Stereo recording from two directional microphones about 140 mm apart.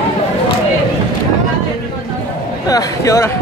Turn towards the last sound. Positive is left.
turn(degrees=25)  # may be behind; listen again after turning